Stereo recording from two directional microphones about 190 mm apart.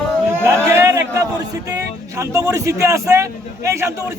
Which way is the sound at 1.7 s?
15° right (ahead or behind).